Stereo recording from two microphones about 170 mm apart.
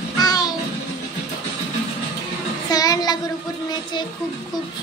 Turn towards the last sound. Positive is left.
turn(degrees=25)  # may be behind; listen again after turning